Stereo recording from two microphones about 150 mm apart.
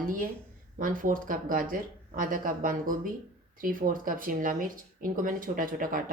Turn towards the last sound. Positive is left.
turn(degrees=-65)  # may be behind; listen again after turning